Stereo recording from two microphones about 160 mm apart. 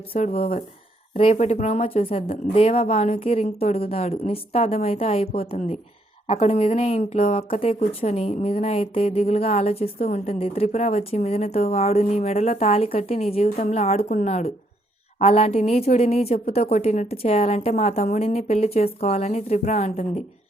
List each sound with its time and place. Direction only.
0.1 s a woman's voice: 40° left (ahead or behind)